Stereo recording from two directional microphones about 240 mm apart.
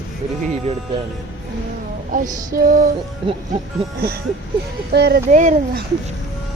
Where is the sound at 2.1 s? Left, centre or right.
Right.